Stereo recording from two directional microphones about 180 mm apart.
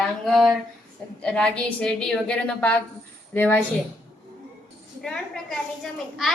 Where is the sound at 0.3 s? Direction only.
Centre (ahead or behind).